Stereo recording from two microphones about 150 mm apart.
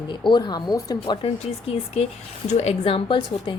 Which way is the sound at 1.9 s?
45° left (ahead or behind).